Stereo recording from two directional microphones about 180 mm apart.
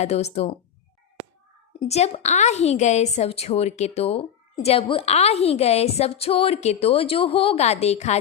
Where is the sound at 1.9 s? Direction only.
35° left (ahead or behind).